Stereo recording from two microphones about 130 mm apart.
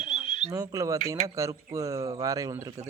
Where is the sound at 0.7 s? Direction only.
25° right (ahead or behind).